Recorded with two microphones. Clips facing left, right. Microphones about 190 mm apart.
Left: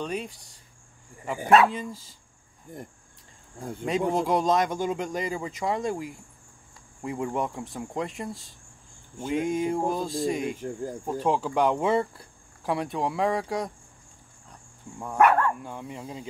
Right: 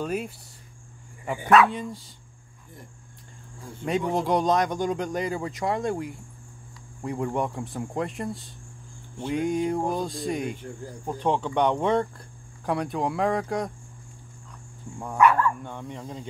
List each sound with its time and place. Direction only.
0.0 s speech: 5° right (ahead or behind)
1.4 s speech: 30° left (ahead or behind)
1.7 s speech: centre (ahead or behind)
3.8 s speech: centre (ahead or behind)
10.6 s speech: 40° left (ahead or behind)
11.1 s speech: 5° left (ahead or behind)
15.1 s speech: 55° left (ahead or behind)
15.6 s speech: 5° left (ahead or behind)